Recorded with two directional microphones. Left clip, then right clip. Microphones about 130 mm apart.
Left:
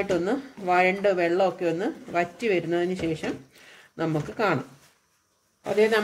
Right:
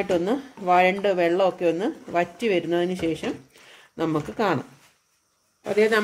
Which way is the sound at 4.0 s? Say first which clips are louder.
Right 2 dB; 70° right (ahead or behind).